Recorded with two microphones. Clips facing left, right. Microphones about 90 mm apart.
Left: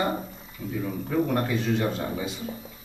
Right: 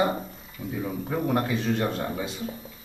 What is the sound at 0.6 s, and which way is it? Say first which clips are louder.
A man's voice: even; 20° right (ahead or behind).